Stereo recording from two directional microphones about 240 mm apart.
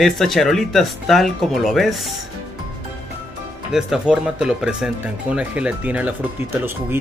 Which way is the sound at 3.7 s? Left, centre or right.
Centre.